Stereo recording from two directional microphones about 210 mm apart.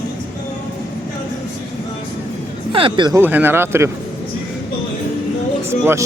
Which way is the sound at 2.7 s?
25° right (ahead or behind).